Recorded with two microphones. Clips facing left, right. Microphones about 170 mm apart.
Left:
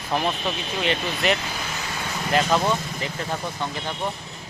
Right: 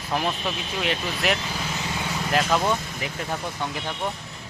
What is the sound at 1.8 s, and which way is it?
Vehicle, 15° right (ahead or behind).